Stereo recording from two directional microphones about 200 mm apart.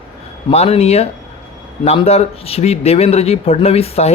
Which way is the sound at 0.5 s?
30° left (ahead or behind).